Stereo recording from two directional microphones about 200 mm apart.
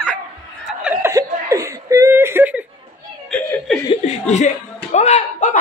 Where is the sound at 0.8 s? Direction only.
15° right (ahead or behind); by 3.8 s centre (ahead or behind).